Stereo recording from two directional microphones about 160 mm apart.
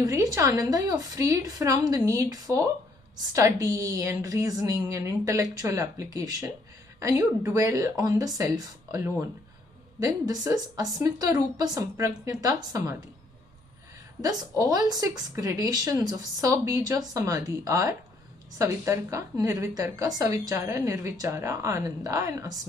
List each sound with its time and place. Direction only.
0.0 s a woman's voice: 20° right (ahead or behind)
14.6 s a woman's voice: 25° right (ahead or behind)